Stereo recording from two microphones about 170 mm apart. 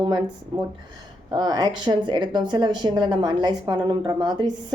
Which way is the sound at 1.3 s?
25° right (ahead or behind).